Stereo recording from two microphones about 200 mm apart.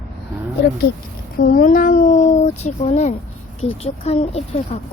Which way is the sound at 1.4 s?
45° left (ahead or behind).